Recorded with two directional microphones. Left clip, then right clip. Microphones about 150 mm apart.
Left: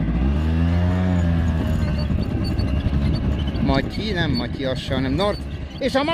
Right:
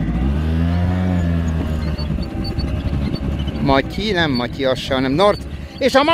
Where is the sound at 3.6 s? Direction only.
50° right (ahead or behind).